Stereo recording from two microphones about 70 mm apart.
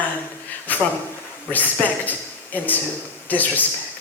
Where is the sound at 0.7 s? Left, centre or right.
Left.